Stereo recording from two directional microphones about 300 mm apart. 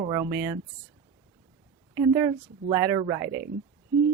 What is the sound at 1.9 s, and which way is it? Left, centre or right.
Speech, centre.